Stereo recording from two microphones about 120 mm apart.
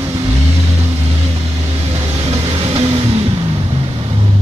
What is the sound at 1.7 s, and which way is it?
Vehicle, 60° right (ahead or behind).